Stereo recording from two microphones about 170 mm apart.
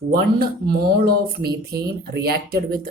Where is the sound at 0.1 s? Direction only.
65° right (ahead or behind).